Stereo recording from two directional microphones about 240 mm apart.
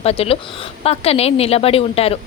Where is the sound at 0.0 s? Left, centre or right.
Left.